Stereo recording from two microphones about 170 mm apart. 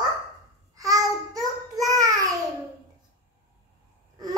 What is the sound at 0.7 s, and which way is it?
Babbling, 20° right (ahead or behind).